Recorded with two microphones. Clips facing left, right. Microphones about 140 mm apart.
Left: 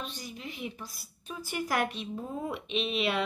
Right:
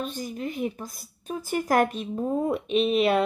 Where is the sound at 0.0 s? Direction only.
50° right (ahead or behind).